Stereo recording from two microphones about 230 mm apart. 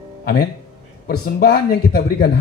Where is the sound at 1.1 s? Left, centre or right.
Left.